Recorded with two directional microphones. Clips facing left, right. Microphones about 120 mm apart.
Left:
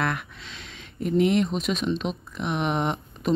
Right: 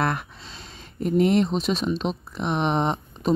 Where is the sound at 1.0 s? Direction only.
40° right (ahead or behind).